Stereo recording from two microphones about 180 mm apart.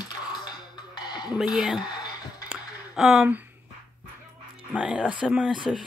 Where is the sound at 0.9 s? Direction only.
25° left (ahead or behind).